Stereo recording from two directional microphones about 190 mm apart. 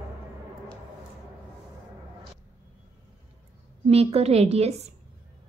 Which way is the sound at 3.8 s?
35° right (ahead or behind).